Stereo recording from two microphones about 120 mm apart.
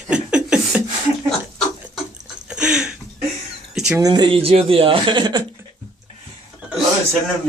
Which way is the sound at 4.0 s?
35° right (ahead or behind).